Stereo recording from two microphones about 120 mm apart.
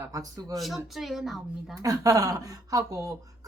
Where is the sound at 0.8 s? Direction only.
Centre (ahead or behind).